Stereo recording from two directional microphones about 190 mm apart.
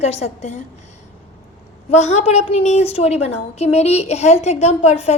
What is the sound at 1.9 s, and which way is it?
A woman's voice, 35° left (ahead or behind).